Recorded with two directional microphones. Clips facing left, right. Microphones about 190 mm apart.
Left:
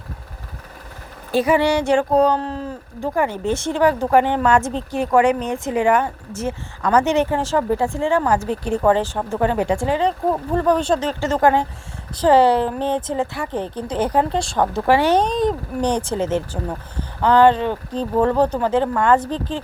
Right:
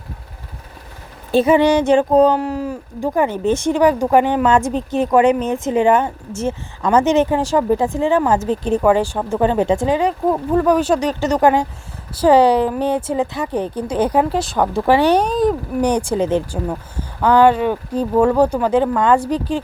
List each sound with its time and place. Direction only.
1.3 s a woman's voice: 25° right (ahead or behind)